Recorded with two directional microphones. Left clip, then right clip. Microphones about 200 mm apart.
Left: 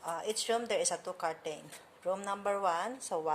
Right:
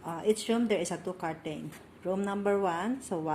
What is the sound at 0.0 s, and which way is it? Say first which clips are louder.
Speech: right 5 dB; 5° left (ahead or behind).